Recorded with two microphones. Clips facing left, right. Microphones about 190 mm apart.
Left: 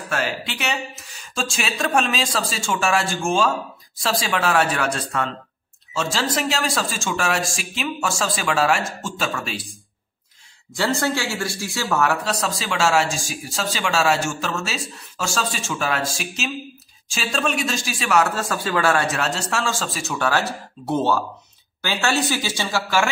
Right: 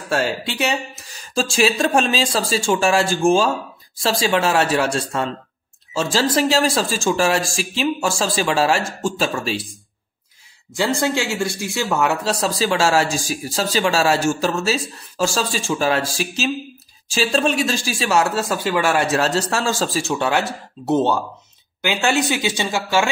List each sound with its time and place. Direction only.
0.1 s speech: 30° right (ahead or behind)
10.7 s speech: 15° right (ahead or behind)
12.3 s speech: 30° right (ahead or behind); by 19.0 s 15° right (ahead or behind)
19.1 s speech: 35° right (ahead or behind); by 23.0 s 20° right (ahead or behind)